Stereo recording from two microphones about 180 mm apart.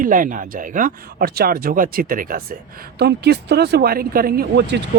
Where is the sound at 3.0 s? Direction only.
65° right (ahead or behind).